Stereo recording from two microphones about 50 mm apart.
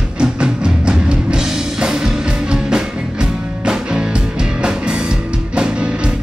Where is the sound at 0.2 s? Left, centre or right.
Centre.